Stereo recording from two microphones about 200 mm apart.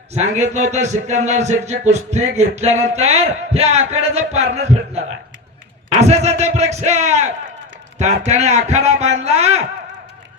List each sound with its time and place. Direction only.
0.1 s a man's voice: 35° right (ahead or behind)